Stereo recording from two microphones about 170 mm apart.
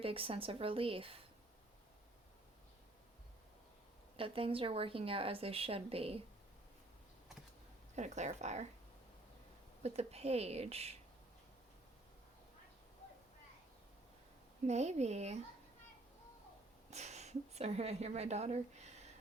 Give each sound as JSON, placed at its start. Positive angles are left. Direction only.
{"t": 0.0, "sound": "speech", "side_deg": -35}
{"t": 4.2, "sound": "speech", "side_deg": -30}
{"t": 7.9, "sound": "speech", "side_deg": -45}
{"t": 9.8, "sound": "speech", "side_deg": -40}
{"t": 14.7, "sound": "speech", "side_deg": -40}
{"t": 16.9, "sound": "a woman's voice", "side_deg": -40}